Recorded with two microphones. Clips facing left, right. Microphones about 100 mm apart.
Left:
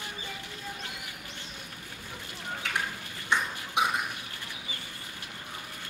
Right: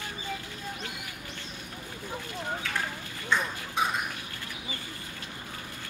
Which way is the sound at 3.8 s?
15° left (ahead or behind).